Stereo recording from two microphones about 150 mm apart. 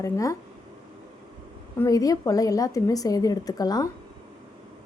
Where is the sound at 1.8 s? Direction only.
25° left (ahead or behind).